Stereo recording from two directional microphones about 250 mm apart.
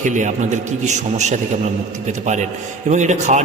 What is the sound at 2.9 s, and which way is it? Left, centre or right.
Speech, right.